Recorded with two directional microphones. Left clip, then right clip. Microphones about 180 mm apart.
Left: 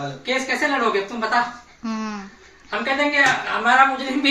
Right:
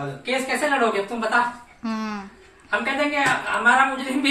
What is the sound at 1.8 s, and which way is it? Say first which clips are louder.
Speech: left 1 dB; 5° left (ahead or behind).